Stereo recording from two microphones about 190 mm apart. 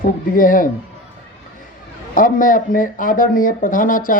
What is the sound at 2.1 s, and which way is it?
Speech, 45° left (ahead or behind).